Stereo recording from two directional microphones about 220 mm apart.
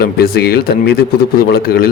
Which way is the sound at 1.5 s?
45° left (ahead or behind).